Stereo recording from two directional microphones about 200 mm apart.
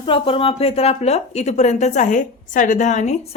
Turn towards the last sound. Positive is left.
turn(degrees=35)  # may be behind; listen again after turning